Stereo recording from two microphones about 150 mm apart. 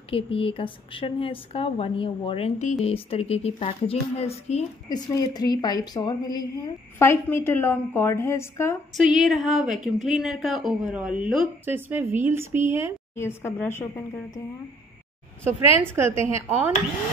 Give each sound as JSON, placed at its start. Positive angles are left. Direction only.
{"t": 0.1, "sound": "speech", "side_deg": 35}
{"t": 4.8, "sound": "a woman's voice", "side_deg": 25}
{"t": 8.9, "sound": "speech", "side_deg": 0}
{"t": 13.1, "sound": "a woman's voice", "side_deg": 15}
{"t": 15.8, "sound": "speech", "side_deg": -15}